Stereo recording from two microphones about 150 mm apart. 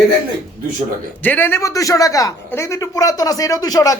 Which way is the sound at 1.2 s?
10° left (ahead or behind).